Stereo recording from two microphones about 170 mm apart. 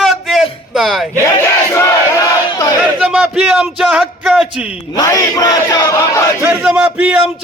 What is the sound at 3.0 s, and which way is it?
Speech, 5° right (ahead or behind).